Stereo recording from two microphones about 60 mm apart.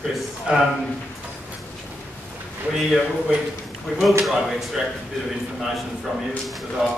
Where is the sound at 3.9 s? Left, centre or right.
Centre.